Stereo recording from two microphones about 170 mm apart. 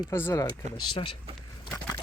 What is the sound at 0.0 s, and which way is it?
Speech, 15° left (ahead or behind).